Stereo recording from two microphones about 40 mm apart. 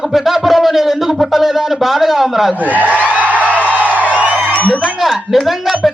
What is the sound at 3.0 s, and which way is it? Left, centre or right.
Music, right.